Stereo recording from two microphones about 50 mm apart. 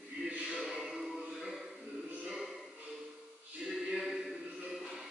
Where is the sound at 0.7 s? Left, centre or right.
Centre.